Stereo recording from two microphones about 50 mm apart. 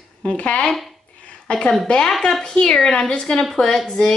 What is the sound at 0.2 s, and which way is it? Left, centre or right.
Speech, left.